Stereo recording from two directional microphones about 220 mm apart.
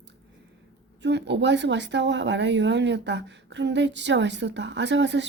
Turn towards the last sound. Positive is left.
turn(degrees=-55)  # may be behind; listen again after turning